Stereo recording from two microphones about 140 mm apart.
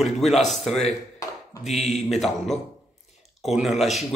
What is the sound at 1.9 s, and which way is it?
Speech, centre (ahead or behind).